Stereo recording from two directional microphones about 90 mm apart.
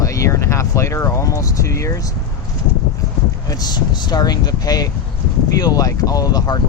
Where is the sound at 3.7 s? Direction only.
50° left (ahead or behind).